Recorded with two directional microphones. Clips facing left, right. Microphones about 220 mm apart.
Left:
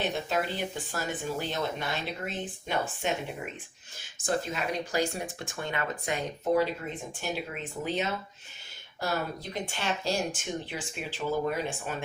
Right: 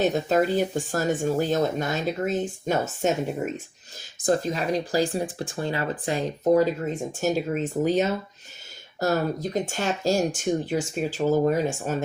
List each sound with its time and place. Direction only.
0.0 s speech: 40° right (ahead or behind)